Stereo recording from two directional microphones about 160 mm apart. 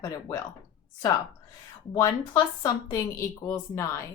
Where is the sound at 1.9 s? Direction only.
20° left (ahead or behind).